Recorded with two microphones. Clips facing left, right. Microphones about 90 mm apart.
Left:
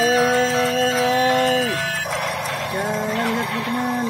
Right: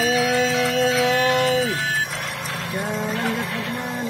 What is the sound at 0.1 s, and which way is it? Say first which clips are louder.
Music: left 3 dB; 40° left (ahead or behind).